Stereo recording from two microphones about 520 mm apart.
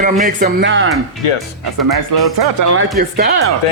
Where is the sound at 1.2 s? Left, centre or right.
Left.